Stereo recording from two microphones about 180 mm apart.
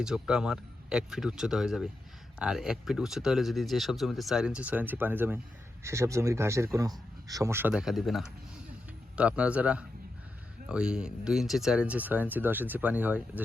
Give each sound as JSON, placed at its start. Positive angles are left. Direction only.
{"t": 0.0, "sound": "speech", "side_deg": -5}
{"t": 7.7, "sound": "speech", "side_deg": 0}